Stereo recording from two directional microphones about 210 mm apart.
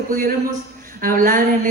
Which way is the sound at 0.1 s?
40° right (ahead or behind).